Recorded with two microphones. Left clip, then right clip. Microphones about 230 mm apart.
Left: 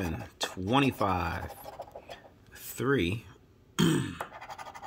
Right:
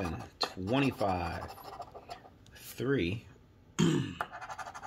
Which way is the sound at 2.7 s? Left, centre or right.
Left.